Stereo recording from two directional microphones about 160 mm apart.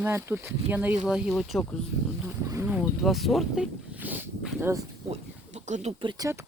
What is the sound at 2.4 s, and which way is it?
Speech, 20° right (ahead or behind).